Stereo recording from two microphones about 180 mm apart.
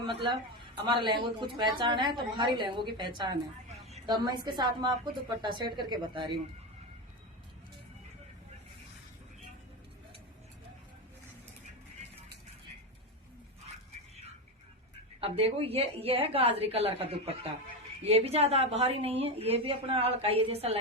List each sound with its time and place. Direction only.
0.0 s a woman's voice: 25° right (ahead or behind)
15.2 s a woman's voice: 35° right (ahead or behind)